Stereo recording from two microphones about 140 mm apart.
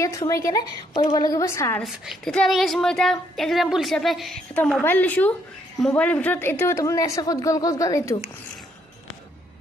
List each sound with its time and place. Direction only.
0.3 s a woman's voice: 25° left (ahead or behind)
1.8 s a woman's voice: 5° left (ahead or behind)
4.8 s a woman's voice: 10° left (ahead or behind)